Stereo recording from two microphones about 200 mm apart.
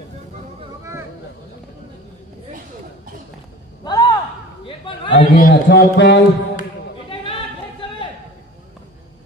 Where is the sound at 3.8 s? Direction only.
20° left (ahead or behind).